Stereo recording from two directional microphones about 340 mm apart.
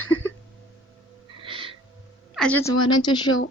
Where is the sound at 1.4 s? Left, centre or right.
Centre.